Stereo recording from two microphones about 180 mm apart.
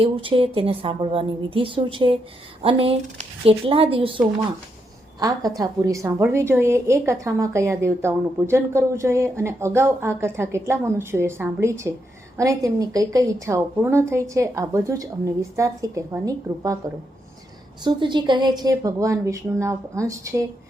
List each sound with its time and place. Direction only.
0.0 s a woman's voice: 30° right (ahead or behind)
5.2 s a woman's voice: 20° right (ahead or behind)
17.8 s a woman's voice: 25° right (ahead or behind)